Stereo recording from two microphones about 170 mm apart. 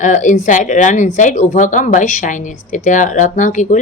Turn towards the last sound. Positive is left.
turn(degrees=45)  # may be behind; listen again after turning